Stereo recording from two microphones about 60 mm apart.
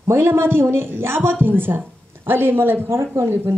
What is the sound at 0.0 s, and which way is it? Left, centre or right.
A woman's voice, right.